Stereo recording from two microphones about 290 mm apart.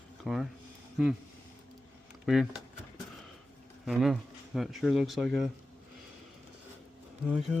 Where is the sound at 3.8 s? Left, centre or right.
Centre.